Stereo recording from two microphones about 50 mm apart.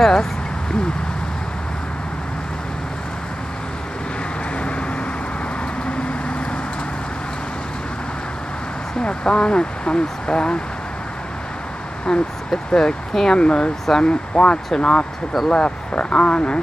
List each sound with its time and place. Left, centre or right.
0.0 s a sound: centre
4.6 s vehicle: left
9.0 s speech: centre
12.1 s speech: centre
14.3 s speech: left